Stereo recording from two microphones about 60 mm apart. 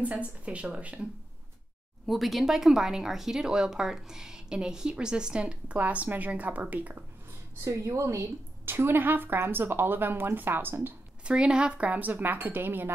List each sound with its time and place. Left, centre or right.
0.0 s a woman's voice: right
2.0 s speech: centre
5.8 s a woman's voice: right
7.6 s speech: right
8.6 s speech: right
11.2 s speech: centre
11.9 s speech: right